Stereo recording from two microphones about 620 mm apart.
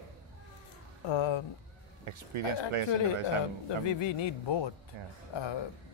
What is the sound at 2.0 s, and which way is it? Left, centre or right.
Speech, right.